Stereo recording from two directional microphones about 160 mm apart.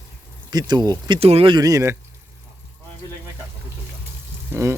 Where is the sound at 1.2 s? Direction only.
40° right (ahead or behind); by 1.9 s 20° right (ahead or behind).